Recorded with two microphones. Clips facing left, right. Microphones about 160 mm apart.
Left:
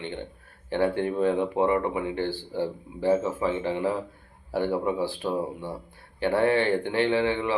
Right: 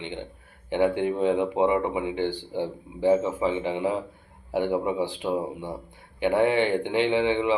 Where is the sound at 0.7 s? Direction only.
15° right (ahead or behind).